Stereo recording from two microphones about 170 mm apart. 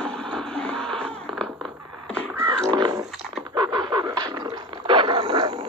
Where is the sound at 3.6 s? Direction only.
25° right (ahead or behind).